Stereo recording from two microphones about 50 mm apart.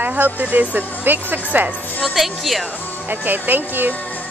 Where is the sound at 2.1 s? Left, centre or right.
Centre.